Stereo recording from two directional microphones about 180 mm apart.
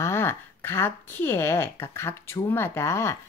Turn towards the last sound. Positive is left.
turn(degrees=15)  # may be behind; listen again after turning